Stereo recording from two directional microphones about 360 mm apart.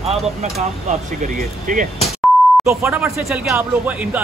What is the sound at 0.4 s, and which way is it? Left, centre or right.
Speech, centre.